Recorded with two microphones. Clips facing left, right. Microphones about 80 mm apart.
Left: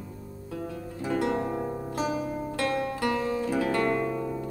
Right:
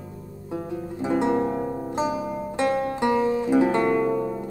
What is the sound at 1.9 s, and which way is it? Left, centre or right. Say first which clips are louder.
Music: right 3 dB; centre.